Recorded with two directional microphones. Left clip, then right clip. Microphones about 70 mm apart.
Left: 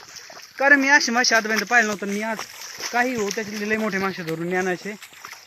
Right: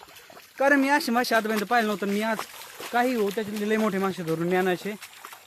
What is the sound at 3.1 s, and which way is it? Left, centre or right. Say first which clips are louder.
Speech: left 1 dB; right.